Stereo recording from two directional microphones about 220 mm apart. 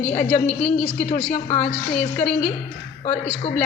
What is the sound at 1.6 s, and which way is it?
Speech, 5° left (ahead or behind).